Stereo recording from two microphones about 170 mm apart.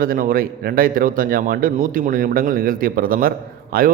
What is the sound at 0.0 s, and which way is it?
A man's voice, 55° right (ahead or behind).